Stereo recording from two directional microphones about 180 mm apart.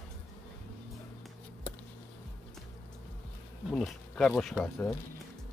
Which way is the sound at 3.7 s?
Centre (ahead or behind).